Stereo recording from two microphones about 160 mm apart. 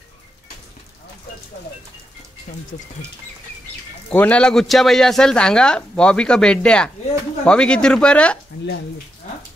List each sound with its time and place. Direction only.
2.7 s speech: 45° left (ahead or behind)
4.1 s a man's voice: 10° left (ahead or behind)